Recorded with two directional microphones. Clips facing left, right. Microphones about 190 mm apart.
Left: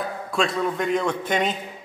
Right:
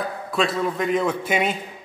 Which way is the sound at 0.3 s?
Centre (ahead or behind).